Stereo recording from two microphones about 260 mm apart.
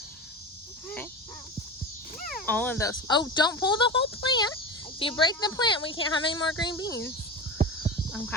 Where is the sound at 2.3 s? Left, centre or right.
Centre.